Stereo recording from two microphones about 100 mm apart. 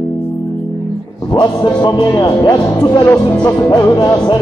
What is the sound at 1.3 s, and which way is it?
Music, 45° left (ahead or behind).